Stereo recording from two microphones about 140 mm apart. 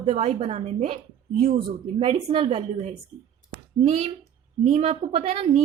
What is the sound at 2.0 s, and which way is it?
A woman's voice, 45° right (ahead or behind).